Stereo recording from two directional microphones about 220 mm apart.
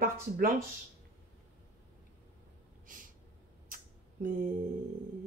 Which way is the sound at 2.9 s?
35° right (ahead or behind).